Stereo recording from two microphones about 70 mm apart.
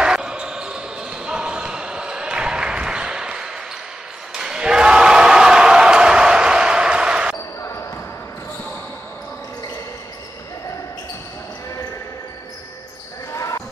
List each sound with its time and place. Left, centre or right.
0.0 s basketball bounce: centre
4.3 s a sound: centre
13.3 s basketball bounce: left